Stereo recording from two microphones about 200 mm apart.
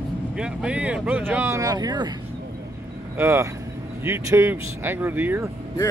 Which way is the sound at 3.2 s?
15° right (ahead or behind).